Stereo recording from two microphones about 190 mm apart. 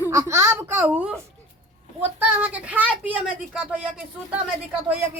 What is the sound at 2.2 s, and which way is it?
Speech, 10° right (ahead or behind).